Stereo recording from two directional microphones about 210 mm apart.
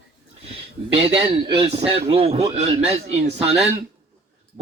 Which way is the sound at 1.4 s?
25° right (ahead or behind).